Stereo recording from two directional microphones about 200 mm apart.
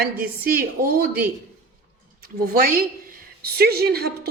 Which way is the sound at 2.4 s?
45° right (ahead or behind).